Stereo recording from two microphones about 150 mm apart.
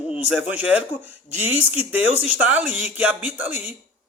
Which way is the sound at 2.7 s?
45° left (ahead or behind).